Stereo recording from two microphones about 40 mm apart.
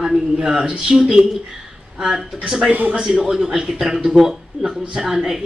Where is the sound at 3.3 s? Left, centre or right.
Centre.